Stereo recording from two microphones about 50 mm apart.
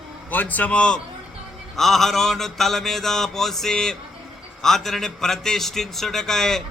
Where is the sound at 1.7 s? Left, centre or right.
Centre.